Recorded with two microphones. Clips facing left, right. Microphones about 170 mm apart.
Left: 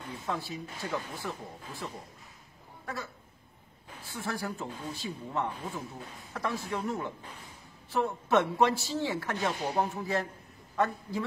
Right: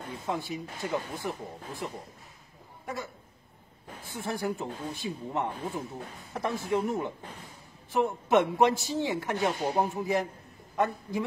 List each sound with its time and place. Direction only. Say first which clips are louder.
0.3 s speech: right 3 dB; 20° right (ahead or behind)
4.1 s speech: right 4 dB; 20° right (ahead or behind)